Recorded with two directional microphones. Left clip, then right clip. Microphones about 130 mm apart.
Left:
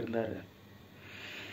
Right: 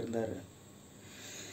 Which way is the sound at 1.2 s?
15° right (ahead or behind).